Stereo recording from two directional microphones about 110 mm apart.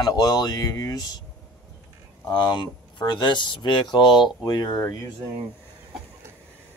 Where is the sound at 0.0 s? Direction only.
35° left (ahead or behind).